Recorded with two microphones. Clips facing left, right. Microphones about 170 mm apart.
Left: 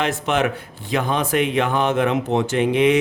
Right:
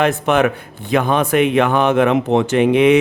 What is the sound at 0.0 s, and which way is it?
Speech, 55° right (ahead or behind).